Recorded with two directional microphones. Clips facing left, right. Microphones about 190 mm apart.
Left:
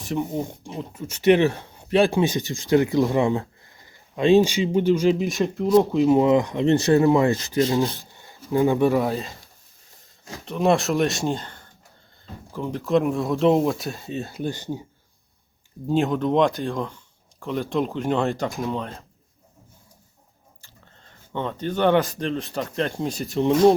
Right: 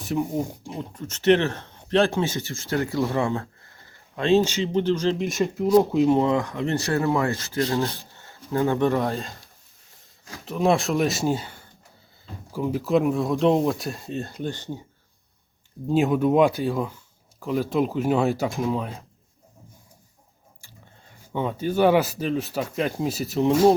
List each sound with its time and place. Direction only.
0.0 s speech: centre (ahead or behind)
1.0 s speech: 10° left (ahead or behind)
5.3 s speech: centre (ahead or behind)
6.1 s speech: 20° left (ahead or behind); by 9.4 s centre (ahead or behind)
10.4 s speech: centre (ahead or behind)
14.4 s speech: 15° left (ahead or behind)
15.9 s speech: 5° right (ahead or behind)
20.6 s speech: 10° right (ahead or behind)